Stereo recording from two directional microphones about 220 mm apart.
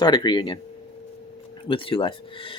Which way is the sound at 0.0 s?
20° left (ahead or behind).